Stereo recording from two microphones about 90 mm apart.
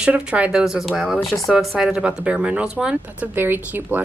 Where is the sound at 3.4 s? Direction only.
25° right (ahead or behind).